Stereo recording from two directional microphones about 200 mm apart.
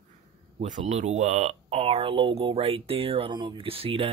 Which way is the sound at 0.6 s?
35° right (ahead or behind).